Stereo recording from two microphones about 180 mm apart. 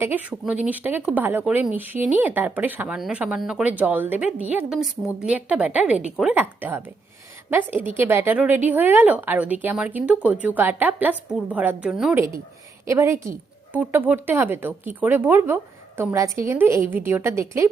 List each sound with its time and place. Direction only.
0.0 s speech: 10° right (ahead or behind)
12.9 s speech: 15° right (ahead or behind)